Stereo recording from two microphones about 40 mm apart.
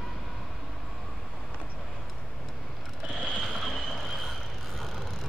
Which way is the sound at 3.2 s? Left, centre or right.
Centre.